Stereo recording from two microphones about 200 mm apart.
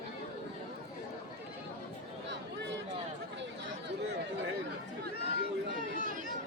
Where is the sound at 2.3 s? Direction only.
60° right (ahead or behind).